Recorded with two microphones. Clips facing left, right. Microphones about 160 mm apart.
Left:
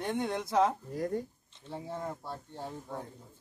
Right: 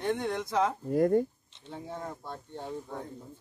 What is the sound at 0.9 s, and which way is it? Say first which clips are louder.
Speech: right 9 dB; 55° right (ahead or behind).